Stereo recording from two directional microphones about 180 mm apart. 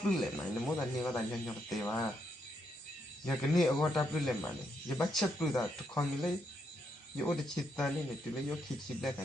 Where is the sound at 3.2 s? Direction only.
Centre (ahead or behind).